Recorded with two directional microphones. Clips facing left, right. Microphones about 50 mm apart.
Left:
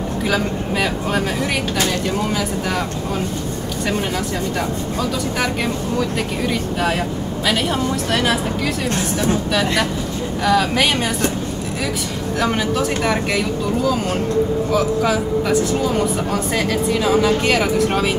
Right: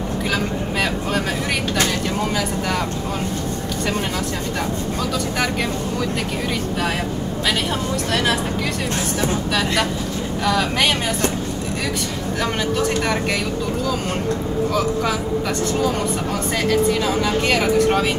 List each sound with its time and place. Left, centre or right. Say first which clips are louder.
0.3 s speech: left 3 dB; centre
12.4 s speech: left 3 dB; centre